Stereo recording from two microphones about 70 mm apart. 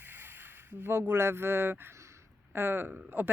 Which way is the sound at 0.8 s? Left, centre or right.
Right.